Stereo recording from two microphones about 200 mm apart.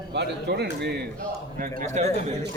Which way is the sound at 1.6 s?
35° right (ahead or behind).